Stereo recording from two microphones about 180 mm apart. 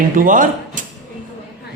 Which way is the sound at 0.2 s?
45° right (ahead or behind).